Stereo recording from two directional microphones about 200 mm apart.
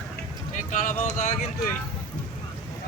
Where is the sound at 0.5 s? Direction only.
40° left (ahead or behind).